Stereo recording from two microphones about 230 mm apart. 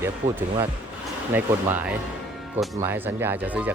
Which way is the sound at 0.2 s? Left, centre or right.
Right.